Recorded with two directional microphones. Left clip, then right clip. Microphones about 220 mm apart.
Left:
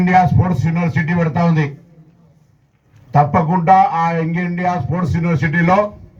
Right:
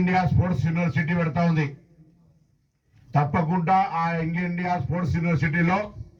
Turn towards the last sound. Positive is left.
turn(degrees=50)  # may be behind; listen again after turning